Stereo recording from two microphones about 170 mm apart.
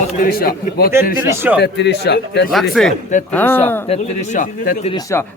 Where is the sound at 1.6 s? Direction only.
85° left.